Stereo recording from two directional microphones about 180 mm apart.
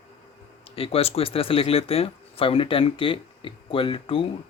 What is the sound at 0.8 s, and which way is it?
Speech, 35° left (ahead or behind).